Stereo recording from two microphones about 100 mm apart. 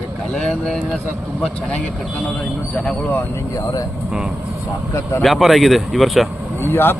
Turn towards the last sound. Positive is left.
turn(degrees=20)  # may be behind; listen again after turning